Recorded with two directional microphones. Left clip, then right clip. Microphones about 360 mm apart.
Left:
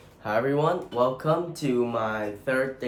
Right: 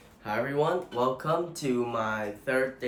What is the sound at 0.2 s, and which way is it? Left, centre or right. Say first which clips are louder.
Speech: left 4 dB; centre.